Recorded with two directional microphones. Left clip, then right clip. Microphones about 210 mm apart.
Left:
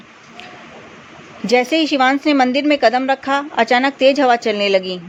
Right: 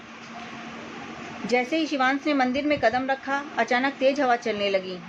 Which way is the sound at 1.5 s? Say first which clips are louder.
Left 10 dB; 50° left (ahead or behind).